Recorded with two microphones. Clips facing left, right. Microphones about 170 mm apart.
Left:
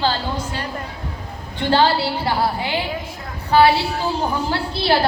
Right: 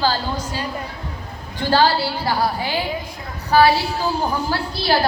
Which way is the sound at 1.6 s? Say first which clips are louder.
Even; 25° left (ahead or behind).